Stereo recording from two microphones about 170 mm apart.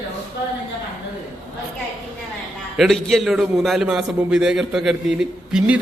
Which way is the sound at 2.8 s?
Centre (ahead or behind).